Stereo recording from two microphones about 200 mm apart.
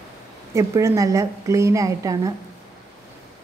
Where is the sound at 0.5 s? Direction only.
15° right (ahead or behind).